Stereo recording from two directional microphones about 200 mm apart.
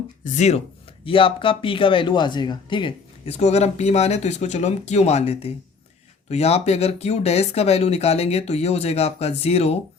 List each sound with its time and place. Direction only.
0.3 s speech: 35° left (ahead or behind)